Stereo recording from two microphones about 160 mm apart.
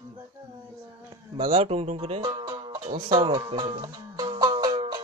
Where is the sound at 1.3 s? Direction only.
40° right (ahead or behind).